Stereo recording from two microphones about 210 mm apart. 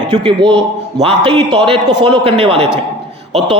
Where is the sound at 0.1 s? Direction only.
25° right (ahead or behind).